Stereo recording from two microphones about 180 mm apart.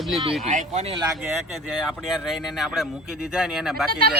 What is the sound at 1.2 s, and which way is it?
Speech, 5° right (ahead or behind).